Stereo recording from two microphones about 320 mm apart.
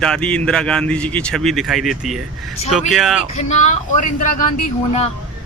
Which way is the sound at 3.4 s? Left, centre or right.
Left.